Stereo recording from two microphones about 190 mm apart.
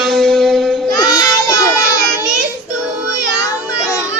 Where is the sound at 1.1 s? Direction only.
20° left (ahead or behind).